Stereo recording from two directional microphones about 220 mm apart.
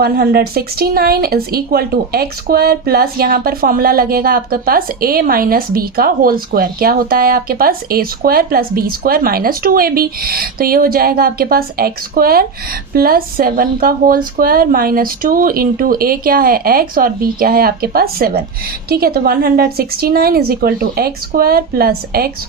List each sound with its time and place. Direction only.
0.0 s speech: 45° right (ahead or behind)